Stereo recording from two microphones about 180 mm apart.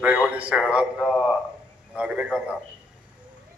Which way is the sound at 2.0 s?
5° right (ahead or behind).